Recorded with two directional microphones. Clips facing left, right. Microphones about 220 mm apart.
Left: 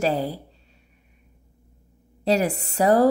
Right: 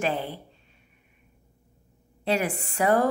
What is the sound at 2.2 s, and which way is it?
Speech, 40° left (ahead or behind).